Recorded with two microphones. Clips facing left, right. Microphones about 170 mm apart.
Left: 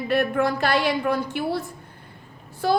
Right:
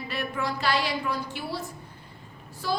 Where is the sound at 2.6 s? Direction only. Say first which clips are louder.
Left 8 dB; 60° left (ahead or behind).